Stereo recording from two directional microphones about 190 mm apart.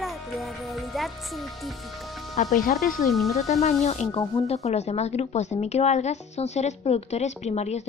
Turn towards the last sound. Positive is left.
turn(degrees=35)  # may be behind; listen again after turning